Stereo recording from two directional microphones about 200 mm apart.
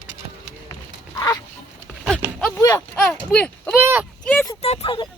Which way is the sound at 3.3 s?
5° left (ahead or behind).